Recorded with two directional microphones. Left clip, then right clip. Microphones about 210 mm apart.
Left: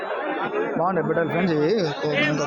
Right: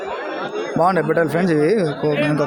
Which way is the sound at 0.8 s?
25° right (ahead or behind).